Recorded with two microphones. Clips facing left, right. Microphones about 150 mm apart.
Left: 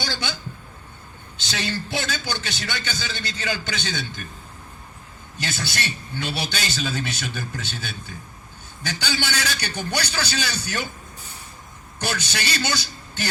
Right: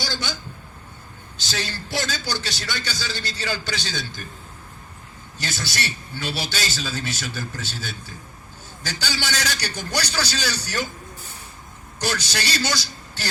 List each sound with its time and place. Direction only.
0.0 s speech: 60° left (ahead or behind)
1.4 s a man's voice: 60° left (ahead or behind)
5.4 s a man's voice: 55° left (ahead or behind)
12.1 s a man's voice: 55° left (ahead or behind)